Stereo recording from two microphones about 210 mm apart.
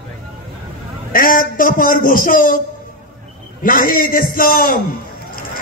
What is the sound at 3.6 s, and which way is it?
A man's voice, 40° left (ahead or behind).